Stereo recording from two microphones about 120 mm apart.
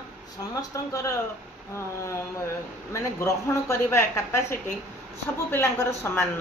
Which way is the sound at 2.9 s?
25° left (ahead or behind).